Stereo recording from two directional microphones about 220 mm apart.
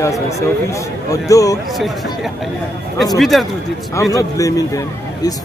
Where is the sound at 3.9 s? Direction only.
15° left (ahead or behind).